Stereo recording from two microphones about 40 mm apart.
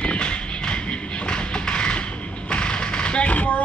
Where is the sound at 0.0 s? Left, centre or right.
Left.